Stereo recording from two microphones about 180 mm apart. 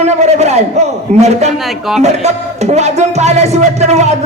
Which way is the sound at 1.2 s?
40° right (ahead or behind).